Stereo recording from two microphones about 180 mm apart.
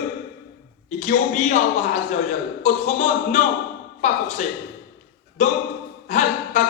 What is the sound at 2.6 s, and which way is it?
Clapping, 40° left (ahead or behind).